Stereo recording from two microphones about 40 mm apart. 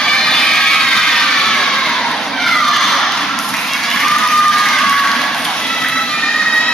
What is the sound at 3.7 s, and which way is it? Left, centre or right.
Crowd, centre.